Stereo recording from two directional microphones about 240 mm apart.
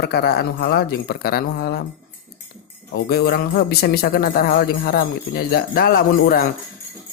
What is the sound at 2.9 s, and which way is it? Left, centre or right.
Speech, left.